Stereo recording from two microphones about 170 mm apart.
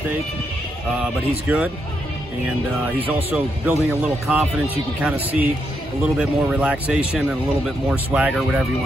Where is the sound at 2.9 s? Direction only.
10° right (ahead or behind).